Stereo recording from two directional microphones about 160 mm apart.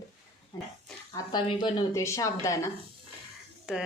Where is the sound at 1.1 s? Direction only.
30° left (ahead or behind).